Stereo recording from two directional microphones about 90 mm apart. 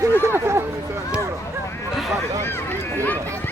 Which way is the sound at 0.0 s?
30° right (ahead or behind).